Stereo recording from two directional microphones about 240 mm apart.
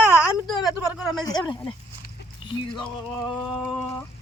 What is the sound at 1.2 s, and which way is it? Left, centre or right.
Speech, centre.